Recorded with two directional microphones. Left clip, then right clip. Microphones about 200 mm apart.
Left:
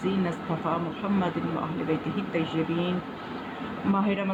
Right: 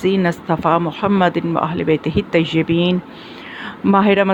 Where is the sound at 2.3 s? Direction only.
45° right (ahead or behind).